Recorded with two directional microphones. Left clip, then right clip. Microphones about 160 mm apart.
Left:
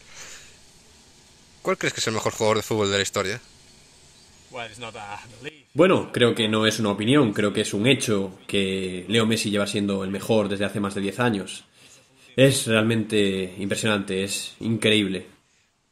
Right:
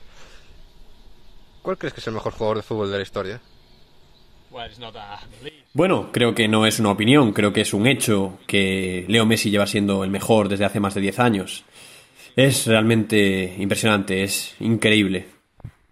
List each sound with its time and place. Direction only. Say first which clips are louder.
1.6 s speech: left 3 dB; 10° left (ahead or behind)
4.6 s speech: even; 10° right (ahead or behind)
5.8 s speech: left 1 dB; 45° right (ahead or behind)